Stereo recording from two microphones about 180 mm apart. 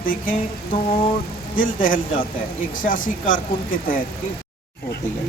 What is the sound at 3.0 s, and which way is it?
Speech, 50° left (ahead or behind).